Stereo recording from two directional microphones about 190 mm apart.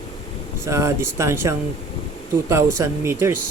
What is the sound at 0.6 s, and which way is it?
Speech, 15° right (ahead or behind).